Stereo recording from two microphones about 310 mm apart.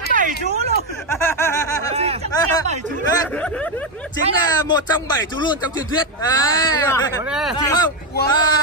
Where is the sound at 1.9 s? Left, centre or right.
Centre.